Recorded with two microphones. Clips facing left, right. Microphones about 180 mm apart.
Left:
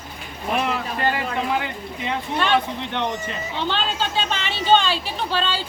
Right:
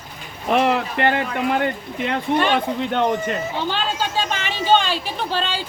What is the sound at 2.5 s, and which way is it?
Speech, 45° right (ahead or behind).